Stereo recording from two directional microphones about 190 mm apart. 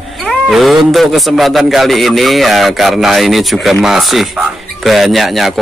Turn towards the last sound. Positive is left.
turn(degrees=0)  # may be behind; listen again after turning